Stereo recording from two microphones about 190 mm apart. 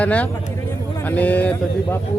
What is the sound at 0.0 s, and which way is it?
Speech, 5° left (ahead or behind).